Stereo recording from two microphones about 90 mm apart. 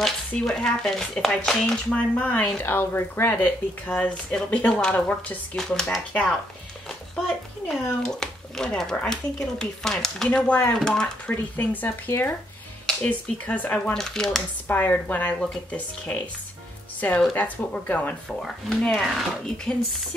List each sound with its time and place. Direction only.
0.0 s speech: 10° left (ahead or behind)
2.1 s speech: 20° left (ahead or behind)
5.6 s speech: 5° left (ahead or behind)
7.6 s speech: 5° left (ahead or behind)
11.2 s speech: 20° left (ahead or behind)
12.1 s speech: 30° left (ahead or behind)
12.8 s speech: 15° left (ahead or behind)
13.9 s speech: 5° left (ahead or behind)
14.7 s speech: 20° left (ahead or behind)
15.4 s speech: 5° left (ahead or behind)
16.1 s speech: 20° left (ahead or behind)
17.3 s speech: 20° left (ahead or behind)
18.4 s speech: 5° left (ahead or behind)